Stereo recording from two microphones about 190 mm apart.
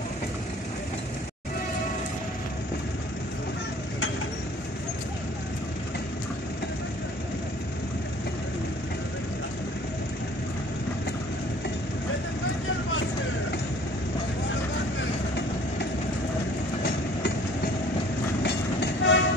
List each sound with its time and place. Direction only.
18.4 s train: 65° left (ahead or behind)